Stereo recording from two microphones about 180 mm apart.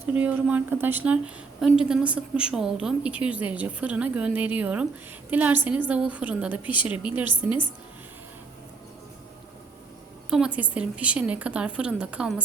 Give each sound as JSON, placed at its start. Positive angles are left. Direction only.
{"t": 0.0, "sound": "a woman's voice", "side_deg": -10}
{"t": 10.2, "sound": "a woman's voice", "side_deg": -5}